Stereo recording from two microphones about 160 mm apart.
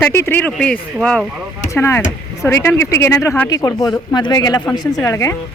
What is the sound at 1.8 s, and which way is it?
Speech, 15° left (ahead or behind).